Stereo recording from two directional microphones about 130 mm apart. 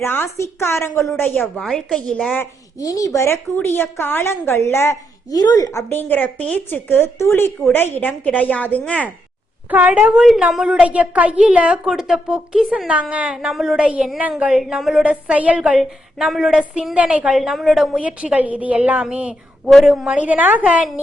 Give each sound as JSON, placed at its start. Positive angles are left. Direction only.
{"t": 0.0, "sound": "a woman's voice", "side_deg": 15}
{"t": 1.6, "sound": "a woman's voice", "side_deg": 5}
{"t": 2.8, "sound": "a woman's voice", "side_deg": 25}
{"t": 9.6, "sound": "a woman's voice", "side_deg": -10}